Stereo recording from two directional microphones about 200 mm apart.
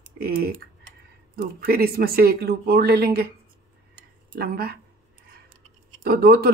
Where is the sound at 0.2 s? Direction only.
50° right (ahead or behind).